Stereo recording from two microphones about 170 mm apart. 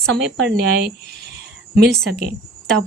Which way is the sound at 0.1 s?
85° right.